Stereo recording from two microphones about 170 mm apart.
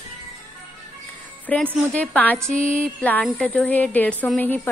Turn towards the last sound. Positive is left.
turn(degrees=10)  # may be behind; listen again after turning